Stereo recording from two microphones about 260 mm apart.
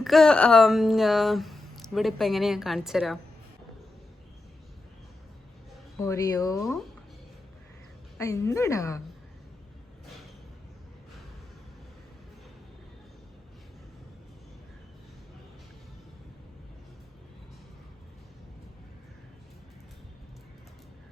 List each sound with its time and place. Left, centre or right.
0.0 s speech: centre
6.0 s speech: centre
8.2 s speech: centre